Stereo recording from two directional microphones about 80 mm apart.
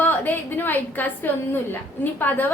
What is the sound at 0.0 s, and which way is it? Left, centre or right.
A woman's voice, left.